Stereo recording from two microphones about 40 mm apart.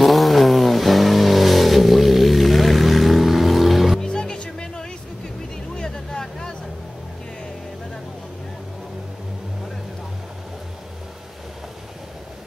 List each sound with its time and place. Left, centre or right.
0.0 s vehicle: centre
4.0 s music: centre
5.8 s vehicle: centre